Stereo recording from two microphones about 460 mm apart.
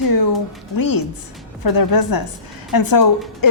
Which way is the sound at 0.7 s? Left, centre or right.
Left.